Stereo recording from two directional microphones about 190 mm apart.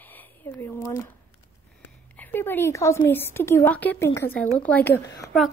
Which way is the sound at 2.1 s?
10° left (ahead or behind).